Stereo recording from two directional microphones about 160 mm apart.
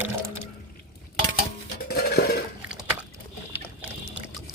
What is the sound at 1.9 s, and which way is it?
Dishes, 75° left (ahead or behind).